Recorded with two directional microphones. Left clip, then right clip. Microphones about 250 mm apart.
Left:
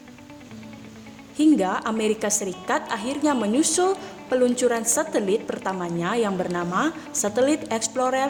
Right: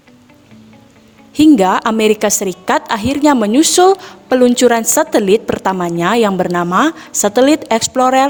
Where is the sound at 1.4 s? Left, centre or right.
Right.